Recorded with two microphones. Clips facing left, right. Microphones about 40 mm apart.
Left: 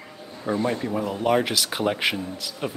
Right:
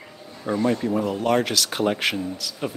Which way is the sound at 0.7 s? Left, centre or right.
Centre.